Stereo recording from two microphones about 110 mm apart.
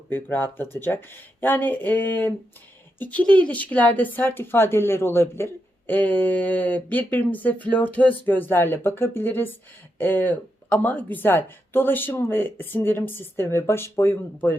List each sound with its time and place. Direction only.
0.1 s speech: 20° left (ahead or behind)